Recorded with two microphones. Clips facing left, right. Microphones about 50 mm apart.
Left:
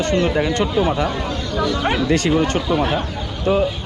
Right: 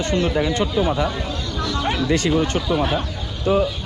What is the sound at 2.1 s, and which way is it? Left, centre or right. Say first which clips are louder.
Speech: left 1 dB; left.